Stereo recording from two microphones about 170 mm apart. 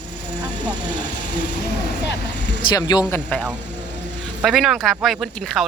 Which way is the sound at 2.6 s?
25° left (ahead or behind).